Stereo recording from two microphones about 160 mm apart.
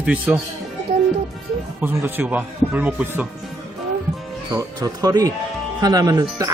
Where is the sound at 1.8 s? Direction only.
10° right (ahead or behind).